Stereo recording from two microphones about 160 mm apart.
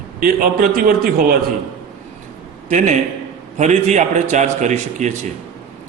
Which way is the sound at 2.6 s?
50° right (ahead or behind).